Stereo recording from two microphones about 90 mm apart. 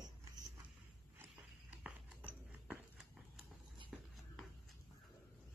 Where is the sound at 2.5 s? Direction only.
15° right (ahead or behind).